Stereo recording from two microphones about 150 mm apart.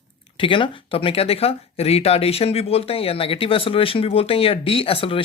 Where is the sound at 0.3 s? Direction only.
35° left (ahead or behind).